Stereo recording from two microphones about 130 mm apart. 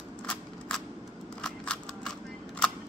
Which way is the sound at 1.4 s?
5° left (ahead or behind).